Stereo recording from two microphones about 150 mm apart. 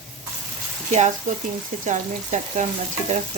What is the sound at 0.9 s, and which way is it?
Speech, 50° right (ahead or behind).